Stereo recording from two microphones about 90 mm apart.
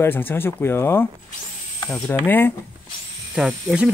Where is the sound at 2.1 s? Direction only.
20° left (ahead or behind).